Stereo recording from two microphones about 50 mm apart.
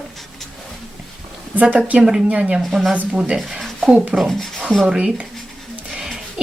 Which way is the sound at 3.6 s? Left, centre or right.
Centre.